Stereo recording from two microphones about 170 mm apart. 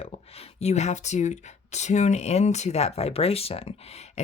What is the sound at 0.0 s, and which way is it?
Speech, 35° left (ahead or behind).